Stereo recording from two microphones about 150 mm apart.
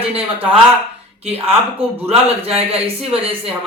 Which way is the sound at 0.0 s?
40° right (ahead or behind).